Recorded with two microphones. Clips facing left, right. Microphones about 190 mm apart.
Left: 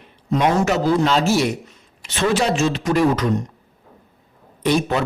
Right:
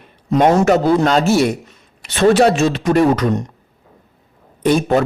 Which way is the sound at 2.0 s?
60° right (ahead or behind).